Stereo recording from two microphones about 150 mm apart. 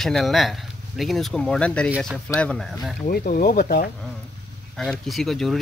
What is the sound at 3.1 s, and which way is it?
Speech, 70° left (ahead or behind).